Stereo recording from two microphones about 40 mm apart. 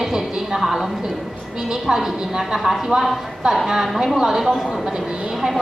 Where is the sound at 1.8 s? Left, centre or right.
Centre.